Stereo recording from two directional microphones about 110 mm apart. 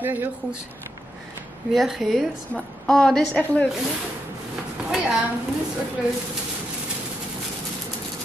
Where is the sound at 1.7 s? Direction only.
Centre (ahead or behind).